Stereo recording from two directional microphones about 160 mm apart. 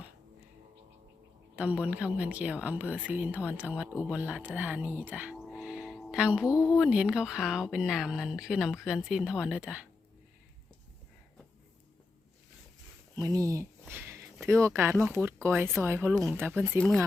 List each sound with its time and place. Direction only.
1.5 s speech: 10° right (ahead or behind)
5.5 s music: 5° right (ahead or behind)
6.5 s speech: 20° left (ahead or behind)
6.7 s speech: 5° right (ahead or behind)
13.1 s speech: 20° right (ahead or behind)